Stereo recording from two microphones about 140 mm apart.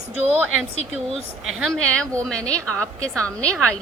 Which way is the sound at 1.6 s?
5° left (ahead or behind).